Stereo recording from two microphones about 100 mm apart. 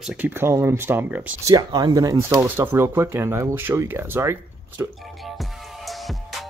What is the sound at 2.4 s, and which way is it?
Speech, 25° right (ahead or behind).